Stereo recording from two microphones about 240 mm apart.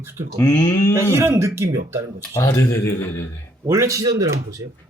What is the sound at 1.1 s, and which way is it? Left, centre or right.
Speech, centre.